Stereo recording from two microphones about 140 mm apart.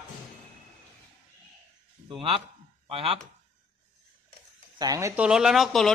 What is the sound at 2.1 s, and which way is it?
A man's voice, 35° right (ahead or behind).